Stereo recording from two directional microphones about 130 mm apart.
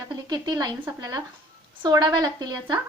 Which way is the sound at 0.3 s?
35° right (ahead or behind).